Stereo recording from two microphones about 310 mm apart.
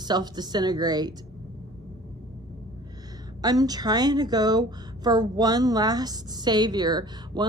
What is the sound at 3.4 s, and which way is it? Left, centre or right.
A woman's voice, centre.